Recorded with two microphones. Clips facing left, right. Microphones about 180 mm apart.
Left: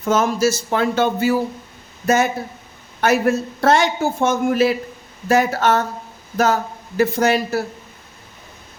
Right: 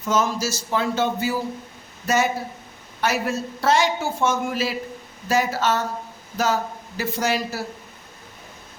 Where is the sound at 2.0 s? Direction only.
50° left (ahead or behind).